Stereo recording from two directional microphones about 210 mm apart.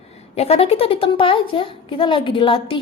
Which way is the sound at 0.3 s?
30° left (ahead or behind).